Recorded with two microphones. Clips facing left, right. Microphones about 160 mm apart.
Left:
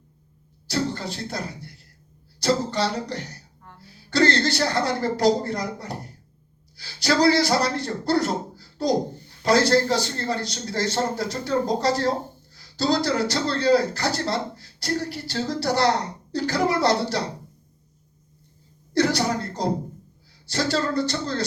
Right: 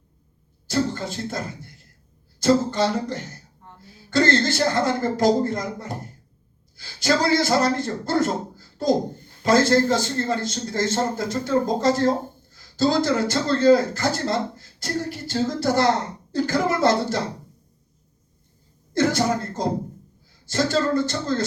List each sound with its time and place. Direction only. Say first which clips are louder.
0.7 s a man's voice: right 2 dB; 45° right (ahead or behind)
3.6 s music: right 1 dB; 20° right (ahead or behind)
4.1 s a man's voice: right 1 dB; 50° right (ahead or behind)
18.9 s a sound: right 1 dB; 50° right (ahead or behind)
20.5 s a man's voice: right 3 dB; 50° right (ahead or behind)